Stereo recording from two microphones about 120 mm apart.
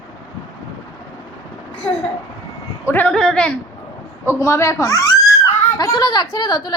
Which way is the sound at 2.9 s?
10° left (ahead or behind).